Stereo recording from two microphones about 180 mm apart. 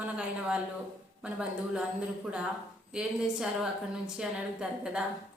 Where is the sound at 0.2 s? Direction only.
5° right (ahead or behind).